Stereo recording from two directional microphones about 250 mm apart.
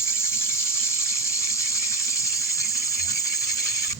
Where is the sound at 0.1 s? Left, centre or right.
Centre.